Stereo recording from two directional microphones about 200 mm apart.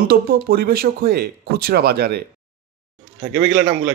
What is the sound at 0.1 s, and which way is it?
Speech, 50° right (ahead or behind).